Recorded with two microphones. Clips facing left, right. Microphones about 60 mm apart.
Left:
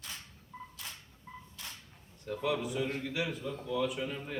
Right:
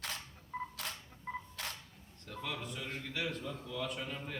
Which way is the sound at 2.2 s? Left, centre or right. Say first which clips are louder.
Left 9 dB; centre.